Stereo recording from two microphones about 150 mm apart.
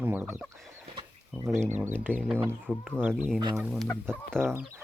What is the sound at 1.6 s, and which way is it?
Speech, 15° right (ahead or behind).